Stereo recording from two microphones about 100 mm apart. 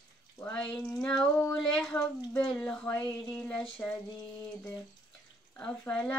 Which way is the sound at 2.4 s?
10° left (ahead or behind).